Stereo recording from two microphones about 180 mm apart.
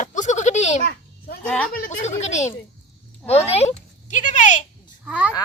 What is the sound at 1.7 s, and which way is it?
Speech, 55° left (ahead or behind).